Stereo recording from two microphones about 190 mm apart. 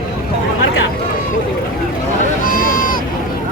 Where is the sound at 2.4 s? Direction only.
50° left (ahead or behind).